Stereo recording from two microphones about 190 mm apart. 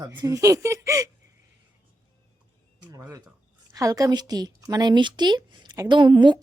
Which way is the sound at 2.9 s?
15° right (ahead or behind).